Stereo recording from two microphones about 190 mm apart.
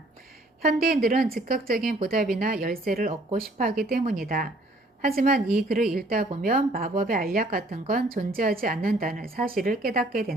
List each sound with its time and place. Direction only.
0.6 s speech: 50° right (ahead or behind)